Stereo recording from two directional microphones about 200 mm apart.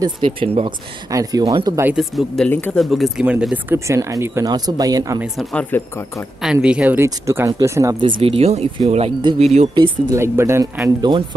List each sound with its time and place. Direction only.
0.0 s speech: 25° right (ahead or behind)
2.0 s speech: centre (ahead or behind); by 5.2 s 15° right (ahead or behind)
5.2 s speech: centre (ahead or behind)
6.4 s speech: 5° right (ahead or behind)
8.2 s speech: 30° right (ahead or behind)
10.1 s speech: 15° right (ahead or behind)